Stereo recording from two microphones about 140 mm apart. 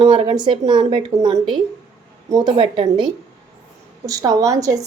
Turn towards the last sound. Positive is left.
turn(degrees=-25)  # may be behind; listen again after turning